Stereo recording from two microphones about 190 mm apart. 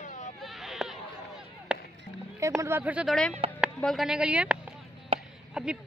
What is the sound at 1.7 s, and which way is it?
Chop, 5° right (ahead or behind).